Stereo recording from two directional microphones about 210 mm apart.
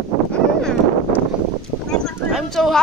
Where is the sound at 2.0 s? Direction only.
Centre (ahead or behind).